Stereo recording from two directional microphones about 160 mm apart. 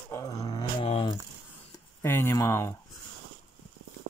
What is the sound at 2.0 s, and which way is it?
Speech, 15° left (ahead or behind).